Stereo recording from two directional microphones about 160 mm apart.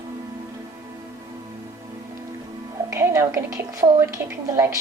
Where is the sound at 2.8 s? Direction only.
15° right (ahead or behind).